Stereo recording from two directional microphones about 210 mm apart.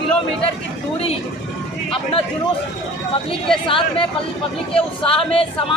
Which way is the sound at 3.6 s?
25° left (ahead or behind).